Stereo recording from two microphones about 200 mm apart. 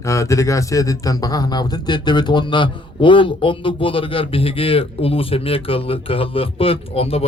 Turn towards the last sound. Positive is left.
turn(degrees=30)  # may be behind; listen again after turning